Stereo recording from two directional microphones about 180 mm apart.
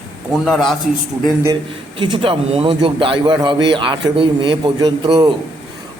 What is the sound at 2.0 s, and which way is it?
A man's voice, 30° right (ahead or behind).